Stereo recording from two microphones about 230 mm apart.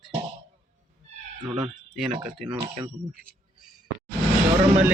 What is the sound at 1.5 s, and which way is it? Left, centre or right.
Speech, centre.